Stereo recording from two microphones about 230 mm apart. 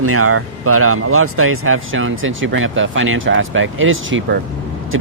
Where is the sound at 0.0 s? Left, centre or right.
Right.